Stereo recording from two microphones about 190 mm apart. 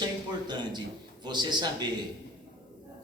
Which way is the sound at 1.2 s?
20° right (ahead or behind).